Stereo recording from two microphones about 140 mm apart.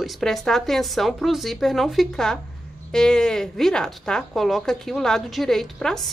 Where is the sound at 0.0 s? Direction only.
Centre (ahead or behind).